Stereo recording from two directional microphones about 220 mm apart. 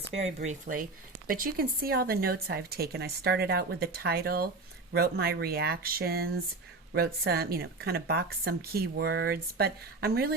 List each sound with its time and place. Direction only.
0.3 s speech: 35° right (ahead or behind)